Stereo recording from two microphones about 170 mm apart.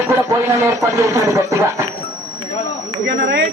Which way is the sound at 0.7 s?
20° right (ahead or behind).